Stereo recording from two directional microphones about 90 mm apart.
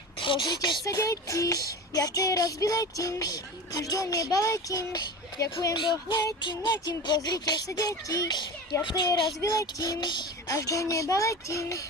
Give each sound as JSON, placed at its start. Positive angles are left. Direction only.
{"t": 0.2, "sound": "speech", "side_deg": 65}
{"t": 0.9, "sound": "child singing", "side_deg": 40}
{"t": 5.7, "sound": "music", "side_deg": 65}
{"t": 6.7, "sound": "speech", "side_deg": 55}
{"t": 8.8, "sound": "music", "side_deg": 60}
{"t": 10.5, "sound": "child singing", "side_deg": 40}